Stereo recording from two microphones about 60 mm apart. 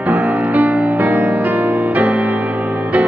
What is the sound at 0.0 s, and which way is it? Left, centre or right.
Music, right.